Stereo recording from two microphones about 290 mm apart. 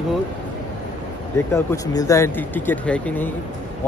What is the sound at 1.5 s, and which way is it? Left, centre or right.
Speech, centre.